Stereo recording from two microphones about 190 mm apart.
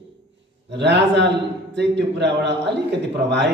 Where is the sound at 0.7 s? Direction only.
65° right (ahead or behind).